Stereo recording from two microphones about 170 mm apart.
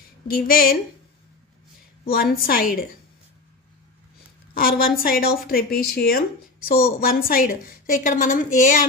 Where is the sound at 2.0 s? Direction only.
60° left (ahead or behind).